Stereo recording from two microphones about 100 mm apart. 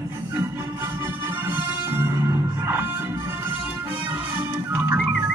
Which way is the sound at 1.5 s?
20° right (ahead or behind).